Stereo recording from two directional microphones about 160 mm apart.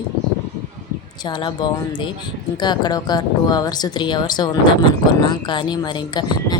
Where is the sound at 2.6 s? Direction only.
25° left (ahead or behind).